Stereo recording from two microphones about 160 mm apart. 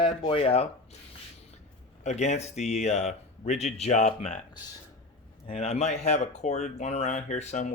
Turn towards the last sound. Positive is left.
turn(degrees=45)  # may be behind; listen again after turning